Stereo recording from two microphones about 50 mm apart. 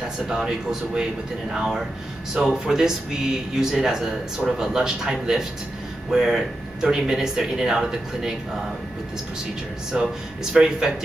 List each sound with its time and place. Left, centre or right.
0.3 s speech: centre
9.9 s speech: right